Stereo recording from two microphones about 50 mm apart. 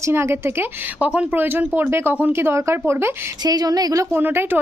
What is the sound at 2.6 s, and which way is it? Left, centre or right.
Speech, right.